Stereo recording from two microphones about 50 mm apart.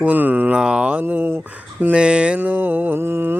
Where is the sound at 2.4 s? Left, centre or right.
Right.